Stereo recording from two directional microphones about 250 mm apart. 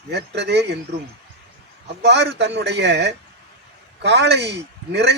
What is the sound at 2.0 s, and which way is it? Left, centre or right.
A man's voice, right.